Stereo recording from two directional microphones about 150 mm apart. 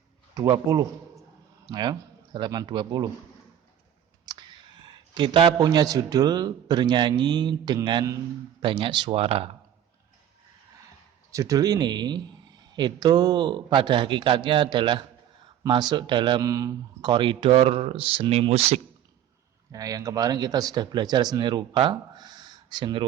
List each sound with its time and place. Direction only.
0.3 s a man's voice: 25° right (ahead or behind)
4.3 s a man's voice: 30° right (ahead or behind)
11.3 s a man's voice: 20° right (ahead or behind); by 18.8 s 40° right (ahead or behind)
19.7 s a man's voice: 25° right (ahead or behind)